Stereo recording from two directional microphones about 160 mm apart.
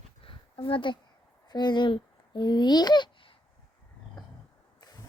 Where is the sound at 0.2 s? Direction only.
35° left (ahead or behind).